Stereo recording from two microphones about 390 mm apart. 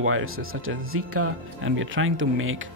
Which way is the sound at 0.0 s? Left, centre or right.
Right.